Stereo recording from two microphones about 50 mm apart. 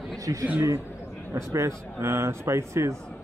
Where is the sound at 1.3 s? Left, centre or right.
Right.